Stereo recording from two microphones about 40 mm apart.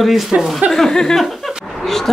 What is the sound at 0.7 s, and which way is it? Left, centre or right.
Speech, centre.